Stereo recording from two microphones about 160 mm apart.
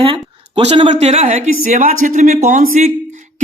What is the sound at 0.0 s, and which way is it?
Speech, 35° right (ahead or behind).